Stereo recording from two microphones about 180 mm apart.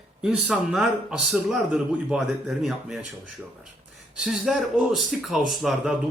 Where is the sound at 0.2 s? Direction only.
5° right (ahead or behind).